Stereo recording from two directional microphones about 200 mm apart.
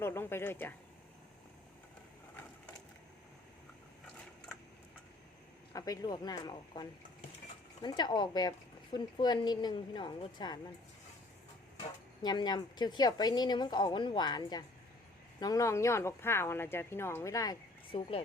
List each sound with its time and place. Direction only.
0.0 s speech: 10° left (ahead or behind)
5.7 s speech: 15° left (ahead or behind)
11.8 s speech: 20° left (ahead or behind)